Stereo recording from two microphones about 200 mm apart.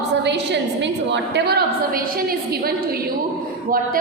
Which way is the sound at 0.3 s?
60° right (ahead or behind).